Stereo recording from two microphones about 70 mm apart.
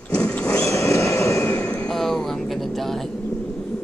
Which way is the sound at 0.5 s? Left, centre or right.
Left.